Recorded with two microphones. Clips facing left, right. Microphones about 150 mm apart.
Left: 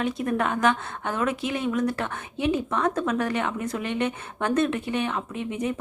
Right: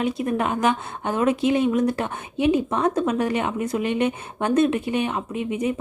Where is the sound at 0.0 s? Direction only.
10° right (ahead or behind).